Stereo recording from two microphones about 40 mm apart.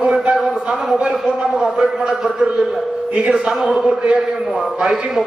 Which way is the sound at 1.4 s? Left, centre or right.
Centre.